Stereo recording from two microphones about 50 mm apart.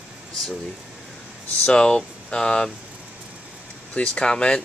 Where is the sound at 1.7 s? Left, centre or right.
Centre.